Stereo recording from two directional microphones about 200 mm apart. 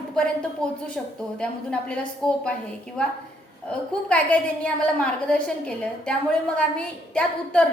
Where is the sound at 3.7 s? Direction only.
5° left (ahead or behind).